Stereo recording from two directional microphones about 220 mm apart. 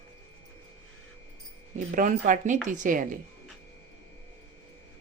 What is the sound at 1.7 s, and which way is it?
Speech, 35° right (ahead or behind).